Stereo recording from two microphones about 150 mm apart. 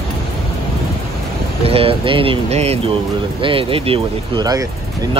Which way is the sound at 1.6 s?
40° right (ahead or behind).